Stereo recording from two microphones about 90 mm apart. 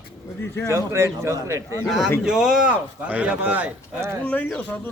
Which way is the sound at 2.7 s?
15° right (ahead or behind).